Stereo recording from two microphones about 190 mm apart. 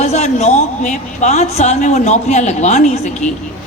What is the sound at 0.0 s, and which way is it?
A man's voice, 35° left (ahead or behind).